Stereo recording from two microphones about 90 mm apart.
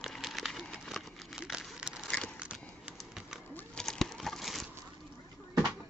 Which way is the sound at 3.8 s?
5° left (ahead or behind).